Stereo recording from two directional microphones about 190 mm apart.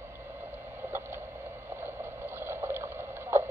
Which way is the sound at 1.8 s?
10° right (ahead or behind).